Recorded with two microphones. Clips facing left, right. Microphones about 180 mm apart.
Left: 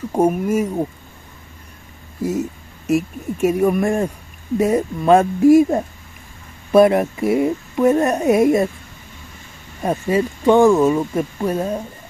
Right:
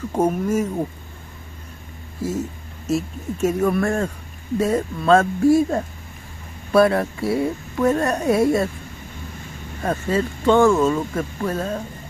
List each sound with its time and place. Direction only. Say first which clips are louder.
0.1 s speech: left 3 dB; 10° left (ahead or behind)
2.2 s speech: left 4 dB; 15° left (ahead or behind)
9.8 s speech: left 3 dB; 15° left (ahead or behind)